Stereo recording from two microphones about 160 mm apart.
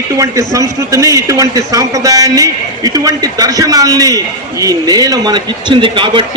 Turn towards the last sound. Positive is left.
turn(degrees=-30)  # may be behind; listen again after turning